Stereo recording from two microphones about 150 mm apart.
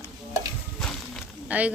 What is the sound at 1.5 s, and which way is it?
Speech, 10° right (ahead or behind).